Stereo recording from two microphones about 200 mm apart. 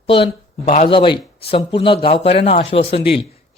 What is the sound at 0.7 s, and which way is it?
Speech, 30° left (ahead or behind).